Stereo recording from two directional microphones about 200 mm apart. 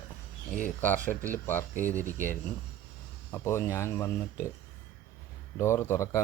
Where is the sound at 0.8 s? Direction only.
10° left (ahead or behind).